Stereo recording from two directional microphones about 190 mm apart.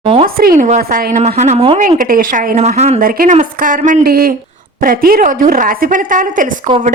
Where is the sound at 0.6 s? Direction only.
45° right (ahead or behind).